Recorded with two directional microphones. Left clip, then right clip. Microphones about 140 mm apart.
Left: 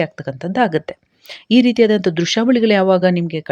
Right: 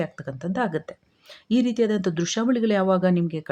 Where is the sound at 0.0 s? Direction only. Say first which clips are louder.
Left 9 dB; 25° left (ahead or behind).